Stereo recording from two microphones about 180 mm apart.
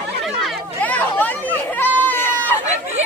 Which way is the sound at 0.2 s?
Centre (ahead or behind).